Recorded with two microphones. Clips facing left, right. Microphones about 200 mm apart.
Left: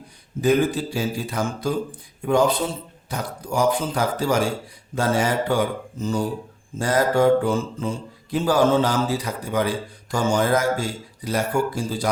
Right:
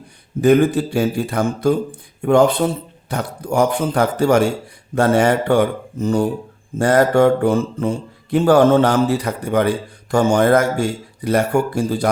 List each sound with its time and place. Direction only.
0.4 s mantra: 60° right (ahead or behind)